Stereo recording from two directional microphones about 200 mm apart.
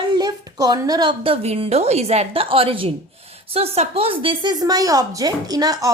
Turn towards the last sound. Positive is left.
turn(degrees=-20)  # may be behind; listen again after turning